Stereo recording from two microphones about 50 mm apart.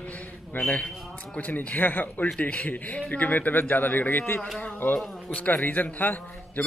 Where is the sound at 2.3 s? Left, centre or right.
Left.